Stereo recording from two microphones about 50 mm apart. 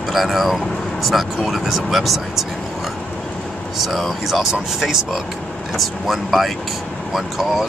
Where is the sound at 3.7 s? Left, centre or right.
Centre.